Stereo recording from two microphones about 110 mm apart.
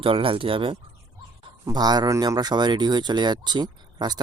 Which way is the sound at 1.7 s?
40° right (ahead or behind).